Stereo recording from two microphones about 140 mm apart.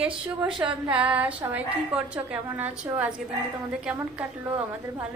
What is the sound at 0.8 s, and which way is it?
A woman's voice, 10° right (ahead or behind).